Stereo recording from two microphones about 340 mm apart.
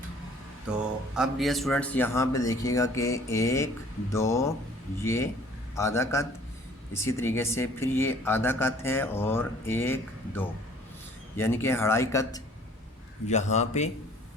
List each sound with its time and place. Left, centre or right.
0.7 s a man's voice: centre